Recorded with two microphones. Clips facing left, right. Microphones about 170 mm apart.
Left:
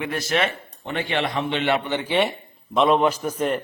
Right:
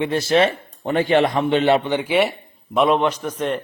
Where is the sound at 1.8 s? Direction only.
15° right (ahead or behind); by 3.6 s 5° left (ahead or behind).